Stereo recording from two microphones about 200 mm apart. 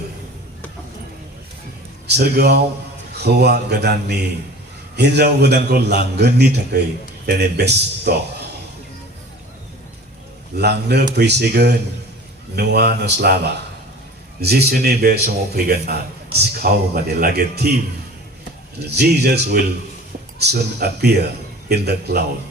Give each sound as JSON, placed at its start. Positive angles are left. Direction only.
{"t": 2.0, "sound": "a man's voice", "side_deg": -55}
{"t": 10.6, "sound": "a man's voice", "side_deg": -55}
{"t": 18.9, "sound": "a man's voice", "side_deg": -50}